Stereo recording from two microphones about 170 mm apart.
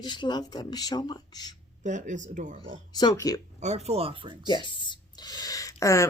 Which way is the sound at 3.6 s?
40° right (ahead or behind).